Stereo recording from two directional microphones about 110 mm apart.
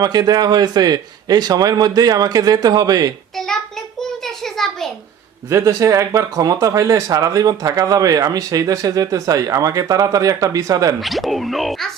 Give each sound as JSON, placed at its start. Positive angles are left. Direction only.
{"t": 0.0, "sound": "speech", "side_deg": -40}
{"t": 4.5, "sound": "a sound", "side_deg": 5}
{"t": 5.5, "sound": "speech", "side_deg": -25}
{"t": 11.0, "sound": "speech", "side_deg": 0}